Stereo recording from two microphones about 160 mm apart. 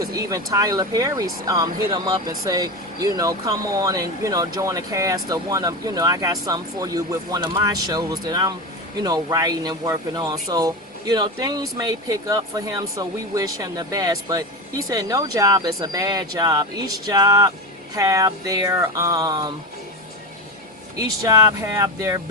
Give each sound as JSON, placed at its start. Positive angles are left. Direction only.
{"t": 0.0, "sound": "speech", "side_deg": -20}
{"t": 21.0, "sound": "speech", "side_deg": -20}